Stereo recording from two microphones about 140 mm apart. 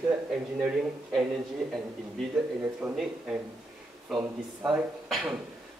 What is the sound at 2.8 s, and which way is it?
Speech, 5° right (ahead or behind).